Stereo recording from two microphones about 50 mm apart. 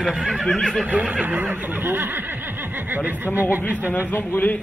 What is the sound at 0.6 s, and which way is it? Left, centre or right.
Speech, centre.